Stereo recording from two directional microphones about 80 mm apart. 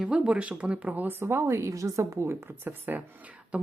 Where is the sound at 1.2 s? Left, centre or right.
Right.